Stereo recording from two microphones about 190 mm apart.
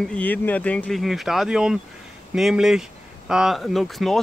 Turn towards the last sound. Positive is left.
turn(degrees=0)  # may be behind; listen again after turning